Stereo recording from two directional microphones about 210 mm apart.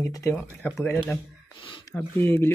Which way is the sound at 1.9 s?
10° left (ahead or behind).